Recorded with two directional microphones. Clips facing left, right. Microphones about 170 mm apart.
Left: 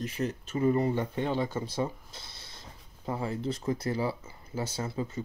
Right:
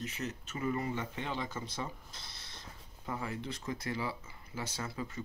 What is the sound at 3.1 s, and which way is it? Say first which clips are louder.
Speech: left 7 dB; 30° left (ahead or behind).